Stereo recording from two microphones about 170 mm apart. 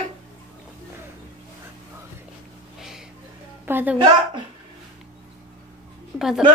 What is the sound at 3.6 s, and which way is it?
Speech, 10° right (ahead or behind).